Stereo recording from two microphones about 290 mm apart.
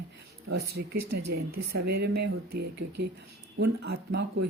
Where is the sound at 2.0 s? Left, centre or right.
Right.